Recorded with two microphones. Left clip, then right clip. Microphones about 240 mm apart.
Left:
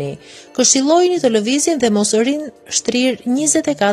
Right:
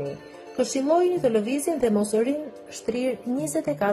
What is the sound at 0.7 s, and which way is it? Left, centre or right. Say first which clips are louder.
Speech: left 7 dB; left.